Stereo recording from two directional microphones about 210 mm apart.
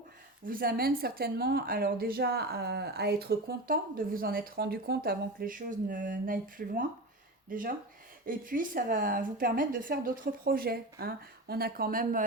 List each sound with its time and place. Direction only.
0.4 s speech: 45° right (ahead or behind)